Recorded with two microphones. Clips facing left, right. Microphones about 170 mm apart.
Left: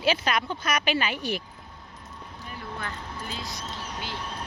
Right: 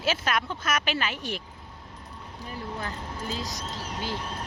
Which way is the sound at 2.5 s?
35° right (ahead or behind).